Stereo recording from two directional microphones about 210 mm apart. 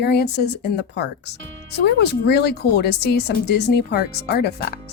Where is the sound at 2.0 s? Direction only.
50° left (ahead or behind).